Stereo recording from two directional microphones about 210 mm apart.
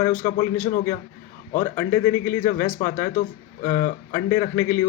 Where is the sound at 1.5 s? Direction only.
15° left (ahead or behind).